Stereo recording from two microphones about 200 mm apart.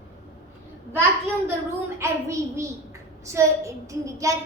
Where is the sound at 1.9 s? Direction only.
15° right (ahead or behind).